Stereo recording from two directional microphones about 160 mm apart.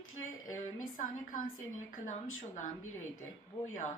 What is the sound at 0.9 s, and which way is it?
Speech, 55° left (ahead or behind).